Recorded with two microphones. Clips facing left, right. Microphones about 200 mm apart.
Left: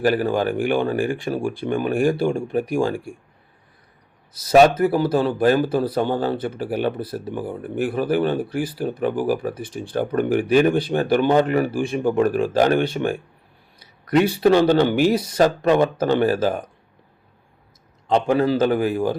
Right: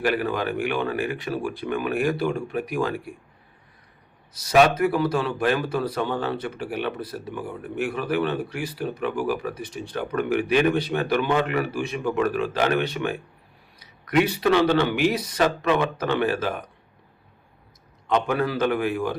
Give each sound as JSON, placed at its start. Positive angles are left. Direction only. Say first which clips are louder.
{"t": 0.0, "sound": "speech", "louder": "left 5 dB", "side_deg": 30}
{"t": 4.8, "sound": "speech", "louder": "left 4 dB", "side_deg": 35}
{"t": 18.1, "sound": "speech", "louder": "left 5 dB", "side_deg": 30}